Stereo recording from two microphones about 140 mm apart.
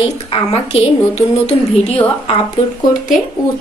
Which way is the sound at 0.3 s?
45° left (ahead or behind).